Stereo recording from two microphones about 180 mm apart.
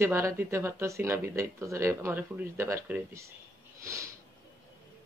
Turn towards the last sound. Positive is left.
turn(degrees=-15)  # may be behind; listen again after turning